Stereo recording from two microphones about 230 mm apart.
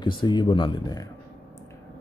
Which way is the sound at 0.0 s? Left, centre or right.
Centre.